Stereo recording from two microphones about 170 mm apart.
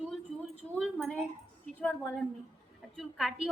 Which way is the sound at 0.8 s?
5° left (ahead or behind).